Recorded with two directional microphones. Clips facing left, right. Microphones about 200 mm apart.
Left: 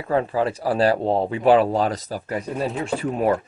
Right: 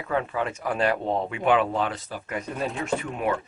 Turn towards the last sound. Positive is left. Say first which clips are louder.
# left 5 dB
turn(degrees=35)  # may be behind; listen again after turning